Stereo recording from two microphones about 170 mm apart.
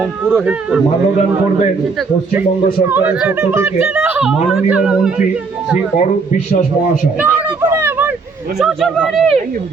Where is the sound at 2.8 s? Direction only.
10° right (ahead or behind).